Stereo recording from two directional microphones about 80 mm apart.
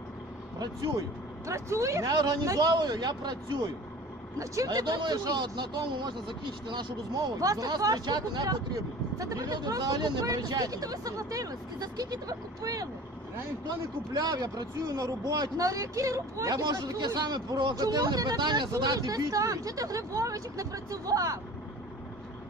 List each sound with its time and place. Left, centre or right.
0.6 s speech: right
1.5 s speech: right
2.4 s speech: right
4.4 s speech: right
4.8 s speech: right
7.3 s speech: right
17.0 s speech: right
18.8 s speech: right